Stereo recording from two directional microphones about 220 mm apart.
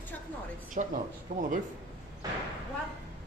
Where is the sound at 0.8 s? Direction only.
35° right (ahead or behind).